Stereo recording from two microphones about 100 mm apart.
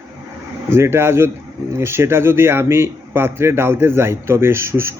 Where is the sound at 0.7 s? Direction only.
25° right (ahead or behind).